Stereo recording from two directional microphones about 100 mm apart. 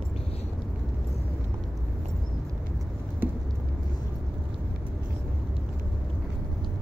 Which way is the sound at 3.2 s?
20° right (ahead or behind).